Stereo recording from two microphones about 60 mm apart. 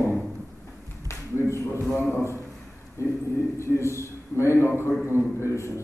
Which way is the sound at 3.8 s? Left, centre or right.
Left.